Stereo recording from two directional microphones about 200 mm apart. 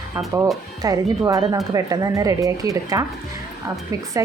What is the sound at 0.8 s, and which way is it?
A woman's voice, 15° right (ahead or behind).